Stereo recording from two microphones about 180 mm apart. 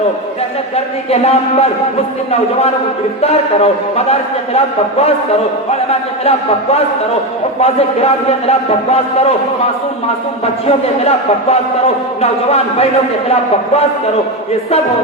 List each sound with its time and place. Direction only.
1.1 s a man's voice: 35° left (ahead or behind)
3.2 s a man's voice: 35° left (ahead or behind)
6.2 s a man's voice: 35° left (ahead or behind)
10.4 s a man's voice: 35° left (ahead or behind)